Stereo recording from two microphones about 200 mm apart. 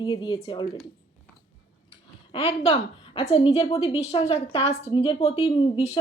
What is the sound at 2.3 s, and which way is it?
Speech, 30° left (ahead or behind).